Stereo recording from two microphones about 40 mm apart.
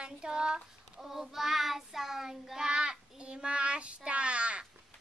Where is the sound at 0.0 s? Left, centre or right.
Centre.